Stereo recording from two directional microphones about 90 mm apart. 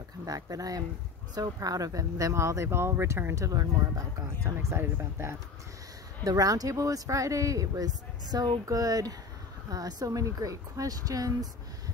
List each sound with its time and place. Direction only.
0.2 s speech: 40° right (ahead or behind)
6.2 s speech: 45° right (ahead or behind)